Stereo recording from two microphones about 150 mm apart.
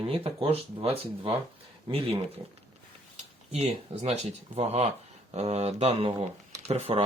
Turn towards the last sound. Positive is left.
turn(degrees=-40)  # may be behind; listen again after turning